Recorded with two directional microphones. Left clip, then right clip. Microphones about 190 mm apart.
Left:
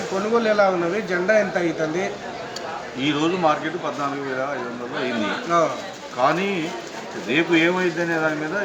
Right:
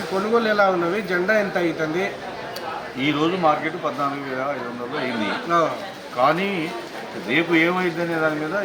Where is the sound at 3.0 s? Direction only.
15° right (ahead or behind).